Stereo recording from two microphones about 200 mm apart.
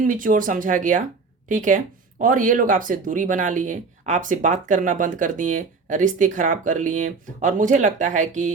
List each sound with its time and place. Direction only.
0.0 s speech: 45° right (ahead or behind)